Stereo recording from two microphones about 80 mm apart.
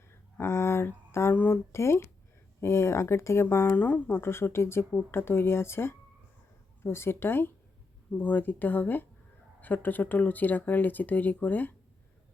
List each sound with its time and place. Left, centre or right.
0.3 s speech: left